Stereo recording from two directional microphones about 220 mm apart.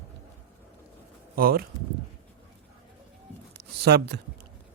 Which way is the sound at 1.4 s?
40° right (ahead or behind).